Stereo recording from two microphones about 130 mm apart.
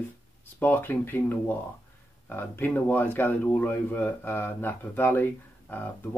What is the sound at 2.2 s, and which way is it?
Speech, 15° left (ahead or behind).